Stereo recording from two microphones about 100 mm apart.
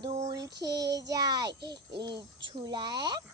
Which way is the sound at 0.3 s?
40° right (ahead or behind).